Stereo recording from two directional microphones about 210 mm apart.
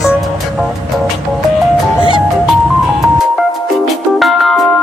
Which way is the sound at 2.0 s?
25° left (ahead or behind).